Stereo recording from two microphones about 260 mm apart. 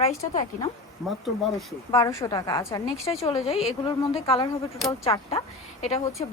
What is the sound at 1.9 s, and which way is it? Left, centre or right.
A woman's voice, centre.